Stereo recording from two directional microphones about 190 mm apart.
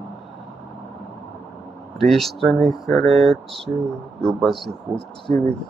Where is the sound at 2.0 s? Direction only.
Centre (ahead or behind).